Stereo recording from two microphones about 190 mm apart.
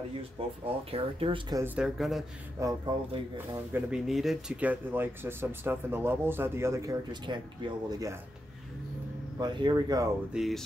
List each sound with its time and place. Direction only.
0.7 s speech: 30° right (ahead or behind)
1.6 s speech: 5° right (ahead or behind)
2.6 s speech: 25° right (ahead or behind)
3.3 s speech: 5° right (ahead or behind)
9.4 s speech: 20° right (ahead or behind)
10.3 s speech: centre (ahead or behind)